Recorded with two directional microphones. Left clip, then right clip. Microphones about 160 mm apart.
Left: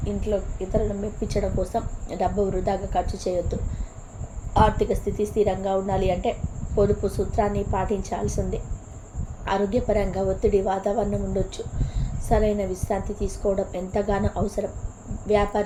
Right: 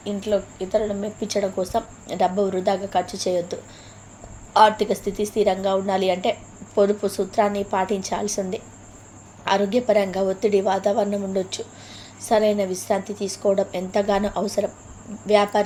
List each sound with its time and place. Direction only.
0.0 s a woman's voice: 25° right (ahead or behind)